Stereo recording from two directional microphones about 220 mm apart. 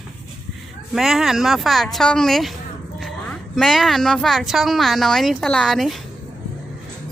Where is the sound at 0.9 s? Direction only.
Centre (ahead or behind).